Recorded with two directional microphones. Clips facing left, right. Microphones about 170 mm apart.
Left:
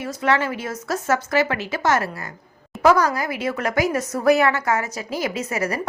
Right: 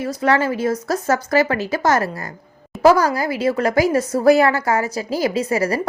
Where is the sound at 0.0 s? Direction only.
35° right (ahead or behind).